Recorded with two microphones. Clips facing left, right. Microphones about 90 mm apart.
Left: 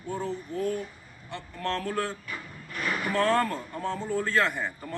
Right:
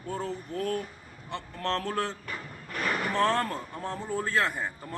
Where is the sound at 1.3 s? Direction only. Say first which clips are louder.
Right 1 dB; 35° right (ahead or behind).